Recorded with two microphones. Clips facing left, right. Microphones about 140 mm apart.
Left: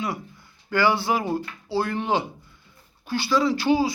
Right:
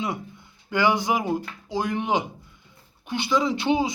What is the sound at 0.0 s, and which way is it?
Speech, 20° right (ahead or behind).